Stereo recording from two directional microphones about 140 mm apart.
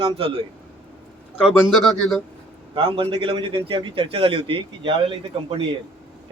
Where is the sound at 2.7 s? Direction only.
40° right (ahead or behind).